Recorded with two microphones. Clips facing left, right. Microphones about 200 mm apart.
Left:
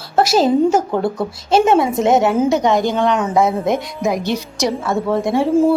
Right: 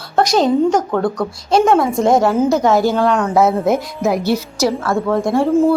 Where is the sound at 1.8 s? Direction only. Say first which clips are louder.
Even; centre (ahead or behind).